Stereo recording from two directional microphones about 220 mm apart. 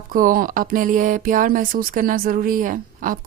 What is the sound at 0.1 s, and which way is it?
Speech, 40° right (ahead or behind).